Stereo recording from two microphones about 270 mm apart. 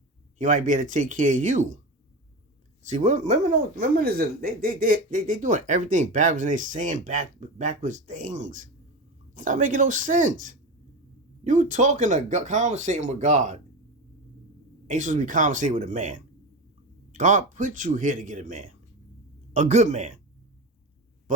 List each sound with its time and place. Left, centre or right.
0.3 s speech: right
2.9 s speech: right
14.8 s speech: right